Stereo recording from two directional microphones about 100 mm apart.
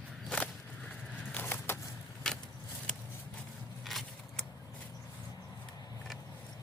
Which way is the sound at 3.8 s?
Centre (ahead or behind).